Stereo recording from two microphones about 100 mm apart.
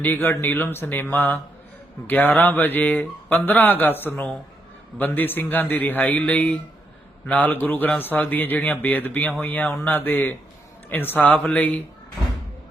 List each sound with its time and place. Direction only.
0.0 s a man's voice: 20° left (ahead or behind)